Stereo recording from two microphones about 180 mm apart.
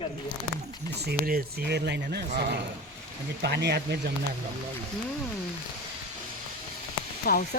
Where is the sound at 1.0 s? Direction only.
60° right (ahead or behind).